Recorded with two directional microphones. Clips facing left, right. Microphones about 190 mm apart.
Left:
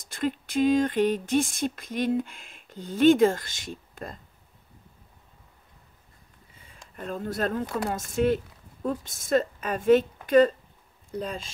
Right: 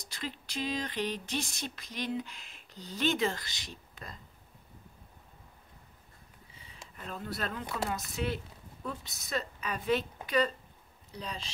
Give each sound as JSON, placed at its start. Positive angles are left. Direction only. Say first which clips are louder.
{"t": 0.0, "sound": "speech", "louder": "left 12 dB", "side_deg": 50}
{"t": 7.0, "sound": "speech", "louder": "left 9 dB", "side_deg": 45}